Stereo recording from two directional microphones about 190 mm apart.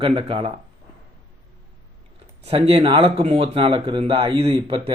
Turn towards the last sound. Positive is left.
turn(degrees=-30)  # may be behind; listen again after turning